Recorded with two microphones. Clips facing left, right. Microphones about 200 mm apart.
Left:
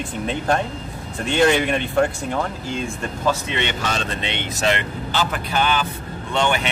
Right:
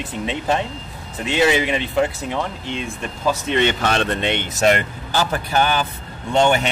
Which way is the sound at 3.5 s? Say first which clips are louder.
Right 6 dB; 50° right (ahead or behind).